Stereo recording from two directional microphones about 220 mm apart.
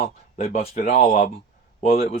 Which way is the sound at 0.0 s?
30° left (ahead or behind).